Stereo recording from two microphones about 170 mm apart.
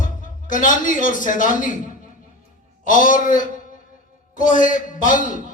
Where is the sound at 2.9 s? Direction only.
50° left (ahead or behind).